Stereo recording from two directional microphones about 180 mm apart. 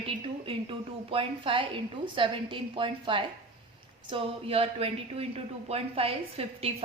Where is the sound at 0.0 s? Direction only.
30° right (ahead or behind).